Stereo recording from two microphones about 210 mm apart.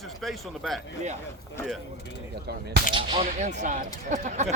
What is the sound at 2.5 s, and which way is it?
Speech, 50° right (ahead or behind).